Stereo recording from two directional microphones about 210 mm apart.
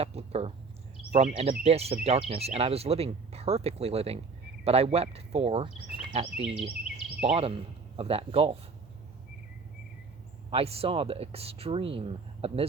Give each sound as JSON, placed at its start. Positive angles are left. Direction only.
{"t": 0.0, "sound": "speech", "side_deg": -30}
{"t": 10.5, "sound": "speech", "side_deg": -30}